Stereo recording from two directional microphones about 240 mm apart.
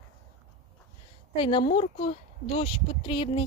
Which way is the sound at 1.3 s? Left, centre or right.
Left.